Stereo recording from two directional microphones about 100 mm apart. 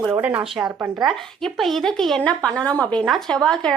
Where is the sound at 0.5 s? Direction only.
5° right (ahead or behind).